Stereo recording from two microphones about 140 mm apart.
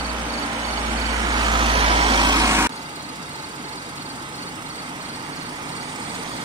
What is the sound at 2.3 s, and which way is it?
Vehicle, 25° right (ahead or behind).